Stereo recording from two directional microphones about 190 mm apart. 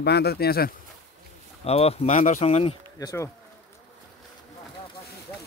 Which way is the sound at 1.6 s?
30° left (ahead or behind).